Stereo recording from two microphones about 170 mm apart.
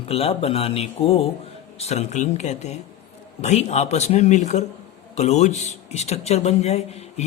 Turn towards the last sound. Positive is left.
turn(degrees=40)  # may be behind; listen again after turning